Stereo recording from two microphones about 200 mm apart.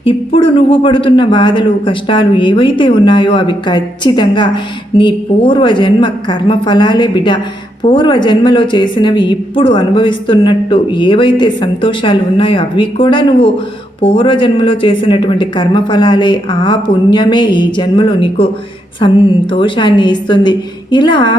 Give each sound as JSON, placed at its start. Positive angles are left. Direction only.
{"t": 0.0, "sound": "a man's voice", "side_deg": 25}